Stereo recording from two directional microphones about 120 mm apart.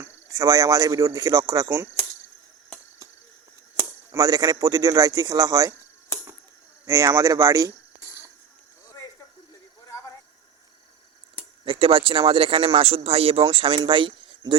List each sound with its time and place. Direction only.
0.3 s speech: 30° right (ahead or behind)
4.1 s speech: 30° right (ahead or behind)
6.8 s speech: 25° right (ahead or behind)
11.6 s speech: 45° right (ahead or behind)